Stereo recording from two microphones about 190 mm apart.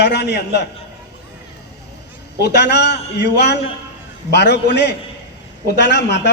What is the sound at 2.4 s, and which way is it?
A man's voice, 60° left (ahead or behind).